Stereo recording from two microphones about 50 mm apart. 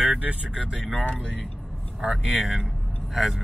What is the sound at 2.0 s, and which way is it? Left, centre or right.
Speech, centre.